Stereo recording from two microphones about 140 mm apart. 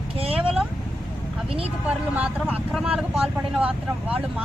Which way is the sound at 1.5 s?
40° right (ahead or behind).